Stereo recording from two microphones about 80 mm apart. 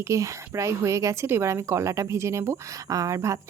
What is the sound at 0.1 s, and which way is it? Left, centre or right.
Speech, right.